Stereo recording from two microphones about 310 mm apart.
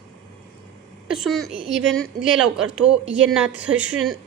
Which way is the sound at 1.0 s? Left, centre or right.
Centre.